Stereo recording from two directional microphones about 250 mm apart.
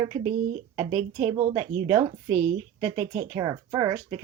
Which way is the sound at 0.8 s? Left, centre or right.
Right.